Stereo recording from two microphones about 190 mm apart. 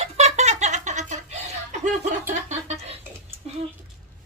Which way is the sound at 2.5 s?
35° right (ahead or behind).